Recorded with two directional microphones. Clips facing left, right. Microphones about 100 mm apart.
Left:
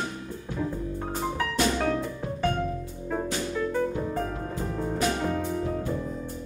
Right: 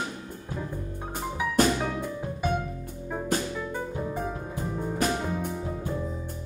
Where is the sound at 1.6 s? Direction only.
45° right (ahead or behind).